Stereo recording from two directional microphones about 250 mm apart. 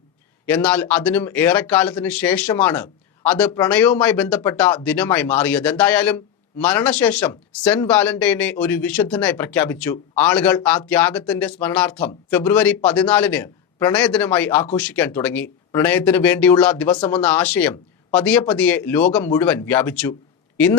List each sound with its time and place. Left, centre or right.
0.4 s speech: centre
16.9 s speech: left
17.2 s speech: centre